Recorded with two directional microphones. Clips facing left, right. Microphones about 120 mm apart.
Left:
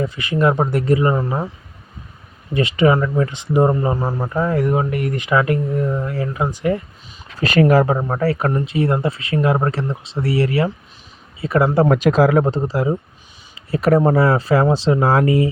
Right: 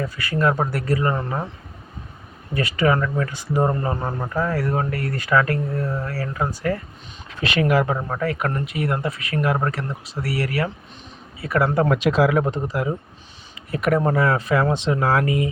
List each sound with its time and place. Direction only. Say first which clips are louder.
0.0 s speech: left 4 dB; 20° left (ahead or behind)
2.6 s speech: left 5 dB; 20° left (ahead or behind)
4.4 s speech: left 5 dB; 20° left (ahead or behind)
7.3 s speech: left 6 dB; 40° left (ahead or behind)
11.9 s speech: left 4 dB; 40° left (ahead or behind)